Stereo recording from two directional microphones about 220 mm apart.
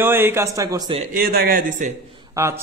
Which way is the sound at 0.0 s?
10° right (ahead or behind).